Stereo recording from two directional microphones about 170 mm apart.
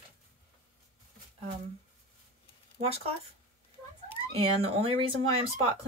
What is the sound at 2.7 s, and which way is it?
Speech, 35° right (ahead or behind).